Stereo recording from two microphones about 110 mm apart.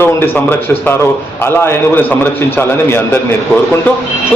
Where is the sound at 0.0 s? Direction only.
20° left (ahead or behind).